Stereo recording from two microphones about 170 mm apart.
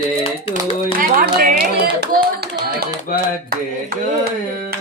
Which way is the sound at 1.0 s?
55° right (ahead or behind).